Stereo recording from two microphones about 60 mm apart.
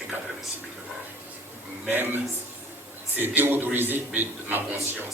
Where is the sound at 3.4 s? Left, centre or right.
Right.